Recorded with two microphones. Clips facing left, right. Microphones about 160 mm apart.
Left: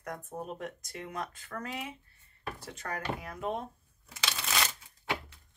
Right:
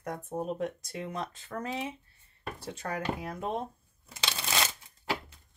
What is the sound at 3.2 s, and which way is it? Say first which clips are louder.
Speech: right 2 dB; 30° right (ahead or behind).